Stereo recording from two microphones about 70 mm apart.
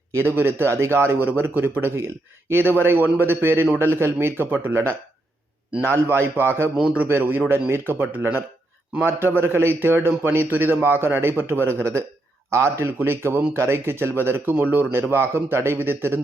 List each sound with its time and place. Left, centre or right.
0.1 s a man's voice: right
6.9 s a man's voice: right